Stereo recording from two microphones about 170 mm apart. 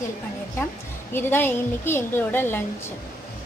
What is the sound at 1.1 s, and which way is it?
A woman's voice, 10° left (ahead or behind).